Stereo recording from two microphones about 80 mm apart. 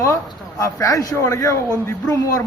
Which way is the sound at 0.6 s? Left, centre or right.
Left.